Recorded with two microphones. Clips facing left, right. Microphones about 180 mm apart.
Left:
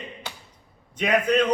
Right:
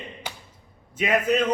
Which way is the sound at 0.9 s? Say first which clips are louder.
Even; 5° right (ahead or behind).